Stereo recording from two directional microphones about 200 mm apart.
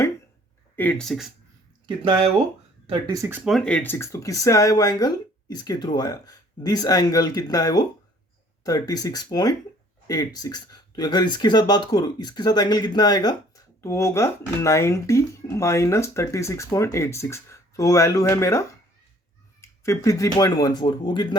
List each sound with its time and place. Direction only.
0.8 s speech: 5° left (ahead or behind)
3.1 s speech: 15° right (ahead or behind); by 21.3 s 20° left (ahead or behind)